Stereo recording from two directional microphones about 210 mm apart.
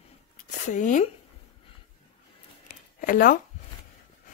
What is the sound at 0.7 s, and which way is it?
Speech, 35° left (ahead or behind).